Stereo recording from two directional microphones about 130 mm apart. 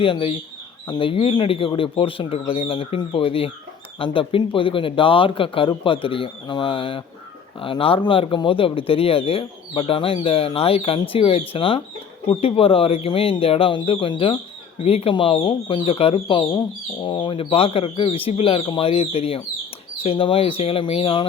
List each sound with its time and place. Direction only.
0.0 s speech: 45° left (ahead or behind)